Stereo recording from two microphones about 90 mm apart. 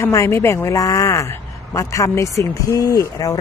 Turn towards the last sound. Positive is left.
turn(degrees=40)  # may be behind; listen again after turning